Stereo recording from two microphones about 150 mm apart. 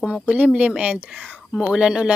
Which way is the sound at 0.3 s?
5° right (ahead or behind).